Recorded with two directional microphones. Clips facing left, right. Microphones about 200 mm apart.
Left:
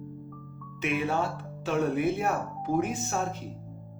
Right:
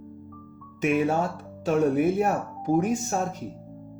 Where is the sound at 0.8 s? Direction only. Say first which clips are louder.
Right 5 dB; 45° right (ahead or behind).